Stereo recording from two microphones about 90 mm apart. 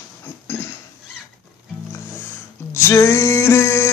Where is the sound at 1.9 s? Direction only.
30° left (ahead or behind).